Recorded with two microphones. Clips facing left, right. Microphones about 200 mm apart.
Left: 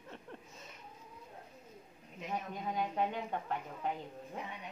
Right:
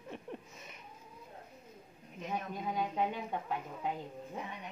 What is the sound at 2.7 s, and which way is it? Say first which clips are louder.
A woman's voice: even; 5° right (ahead or behind).